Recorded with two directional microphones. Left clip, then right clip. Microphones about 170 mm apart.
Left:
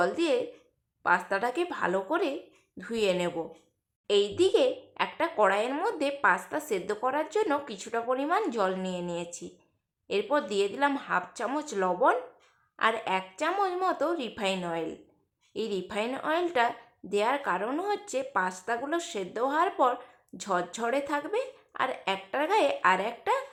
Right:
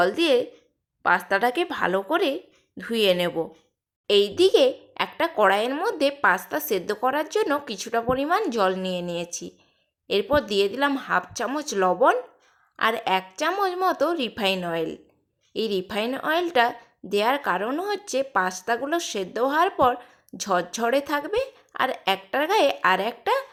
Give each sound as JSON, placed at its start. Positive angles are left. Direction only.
{"t": 0.0, "sound": "speech", "side_deg": -25}